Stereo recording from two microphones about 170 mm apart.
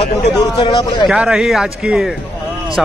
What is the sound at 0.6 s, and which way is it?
Speech, 25° left (ahead or behind).